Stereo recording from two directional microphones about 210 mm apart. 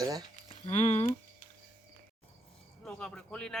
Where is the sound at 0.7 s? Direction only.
30° left (ahead or behind).